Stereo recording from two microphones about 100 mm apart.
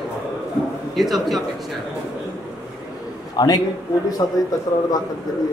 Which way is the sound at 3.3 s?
40° left (ahead or behind).